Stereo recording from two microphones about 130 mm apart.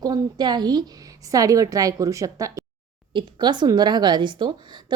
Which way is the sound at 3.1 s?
35° right (ahead or behind).